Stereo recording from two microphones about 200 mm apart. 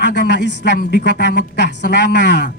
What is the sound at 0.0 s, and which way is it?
A man's voice, 60° left (ahead or behind).